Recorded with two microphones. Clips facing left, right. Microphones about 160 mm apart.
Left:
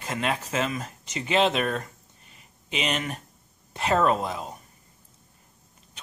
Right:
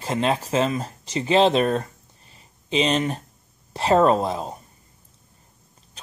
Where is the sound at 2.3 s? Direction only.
30° right (ahead or behind).